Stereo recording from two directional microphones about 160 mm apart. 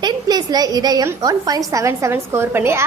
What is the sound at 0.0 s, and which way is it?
A woman's voice, 25° right (ahead or behind).